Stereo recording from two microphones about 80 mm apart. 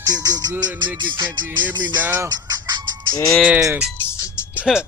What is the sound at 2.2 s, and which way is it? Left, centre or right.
Speech, right.